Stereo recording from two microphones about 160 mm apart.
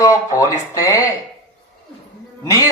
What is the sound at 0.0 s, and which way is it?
Speech, 20° left (ahead or behind).